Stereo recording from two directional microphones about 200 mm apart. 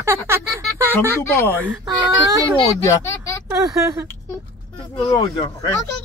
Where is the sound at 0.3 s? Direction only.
10° right (ahead or behind).